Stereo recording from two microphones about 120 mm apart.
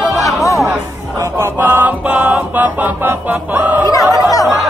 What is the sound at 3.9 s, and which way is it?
Speech, 30° left (ahead or behind).